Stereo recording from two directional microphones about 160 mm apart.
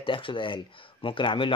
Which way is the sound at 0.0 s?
30° left (ahead or behind).